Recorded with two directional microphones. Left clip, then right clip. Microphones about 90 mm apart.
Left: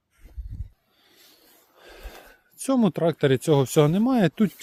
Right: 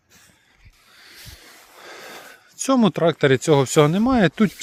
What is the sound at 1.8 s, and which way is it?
Speech, 35° left (ahead or behind).